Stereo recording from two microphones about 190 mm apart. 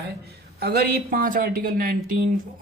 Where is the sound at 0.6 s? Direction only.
55° right (ahead or behind).